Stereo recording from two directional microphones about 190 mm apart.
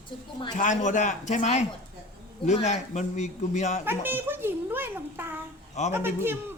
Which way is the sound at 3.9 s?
10° right (ahead or behind).